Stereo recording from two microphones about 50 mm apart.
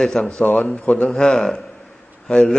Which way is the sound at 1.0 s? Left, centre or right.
Centre.